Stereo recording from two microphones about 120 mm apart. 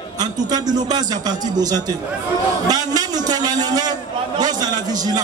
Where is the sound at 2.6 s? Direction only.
30° right (ahead or behind).